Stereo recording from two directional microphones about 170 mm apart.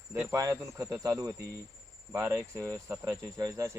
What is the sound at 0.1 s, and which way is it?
Speech, 15° right (ahead or behind).